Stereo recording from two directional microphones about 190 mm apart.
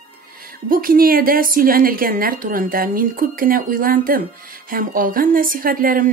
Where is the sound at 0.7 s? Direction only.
50° right (ahead or behind).